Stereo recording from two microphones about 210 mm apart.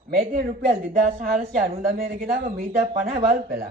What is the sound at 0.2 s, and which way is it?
A woman's voice, 45° right (ahead or behind).